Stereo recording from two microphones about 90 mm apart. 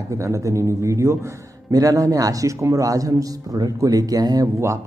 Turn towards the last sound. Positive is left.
turn(degrees=-45)  # may be behind; listen again after turning